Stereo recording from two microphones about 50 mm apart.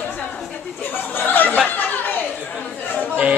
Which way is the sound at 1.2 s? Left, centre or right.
Left.